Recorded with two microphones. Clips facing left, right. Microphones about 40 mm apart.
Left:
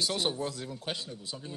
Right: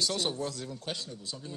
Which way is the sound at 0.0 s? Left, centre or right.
Centre.